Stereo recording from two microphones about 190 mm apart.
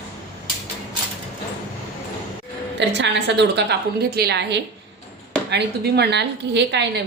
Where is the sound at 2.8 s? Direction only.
65° right (ahead or behind).